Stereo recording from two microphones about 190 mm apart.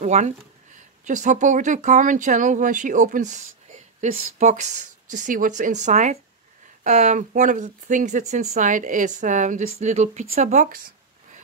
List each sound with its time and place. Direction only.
0.0 s speech: 40° right (ahead or behind)